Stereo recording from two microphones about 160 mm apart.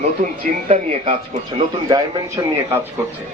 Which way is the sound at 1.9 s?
20° right (ahead or behind).